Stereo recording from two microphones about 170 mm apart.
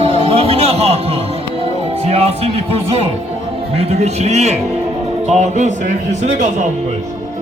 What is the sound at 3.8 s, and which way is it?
A man's voice, 40° right (ahead or behind).